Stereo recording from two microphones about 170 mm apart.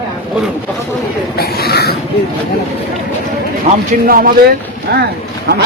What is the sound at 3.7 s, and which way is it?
Speech, 40° right (ahead or behind).